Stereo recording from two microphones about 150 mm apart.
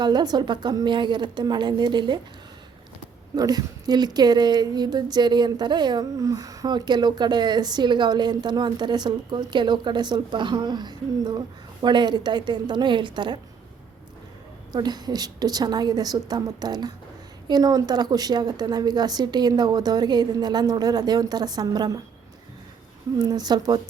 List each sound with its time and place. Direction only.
0.0 s a woman's voice: 30° right (ahead or behind)
3.3 s a woman's voice: 25° right (ahead or behind)
14.7 s a woman's voice: 30° right (ahead or behind)
23.1 s a woman's voice: 25° right (ahead or behind)